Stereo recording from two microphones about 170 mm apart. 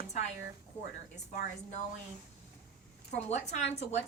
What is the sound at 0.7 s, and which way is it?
Speech, 10° left (ahead or behind).